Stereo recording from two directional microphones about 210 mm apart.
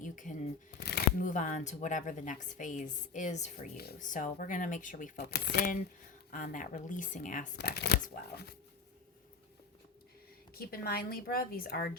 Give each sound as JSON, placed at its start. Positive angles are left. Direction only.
{"t": 0.0, "sound": "shuffling cards", "side_deg": 35}
{"t": 0.7, "sound": "shuffling cards", "side_deg": 50}
{"t": 1.2, "sound": "a woman's voice", "side_deg": 35}
{"t": 6.3, "sound": "a woman's voice", "side_deg": 40}
{"t": 10.5, "sound": "a woman's voice", "side_deg": 45}